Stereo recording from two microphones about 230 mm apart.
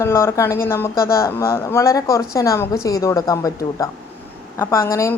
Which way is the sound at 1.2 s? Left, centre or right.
Centre.